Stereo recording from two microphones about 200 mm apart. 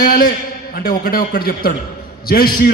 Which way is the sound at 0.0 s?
45° left (ahead or behind).